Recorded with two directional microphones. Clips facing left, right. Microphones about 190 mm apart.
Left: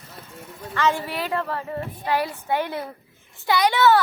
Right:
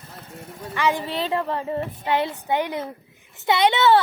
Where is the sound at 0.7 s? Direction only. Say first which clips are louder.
Even; 15° right (ahead or behind).